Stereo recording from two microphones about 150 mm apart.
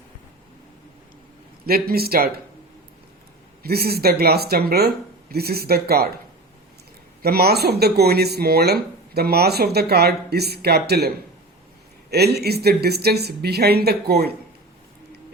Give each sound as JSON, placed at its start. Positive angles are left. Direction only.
{"t": 1.6, "sound": "speech", "side_deg": -90}
{"t": 3.6, "sound": "speech", "side_deg": -90}
{"t": 7.2, "sound": "speech", "side_deg": -90}
{"t": 12.1, "sound": "speech", "side_deg": -90}